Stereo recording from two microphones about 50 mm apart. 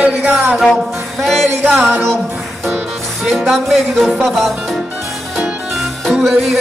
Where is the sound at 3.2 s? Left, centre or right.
Centre.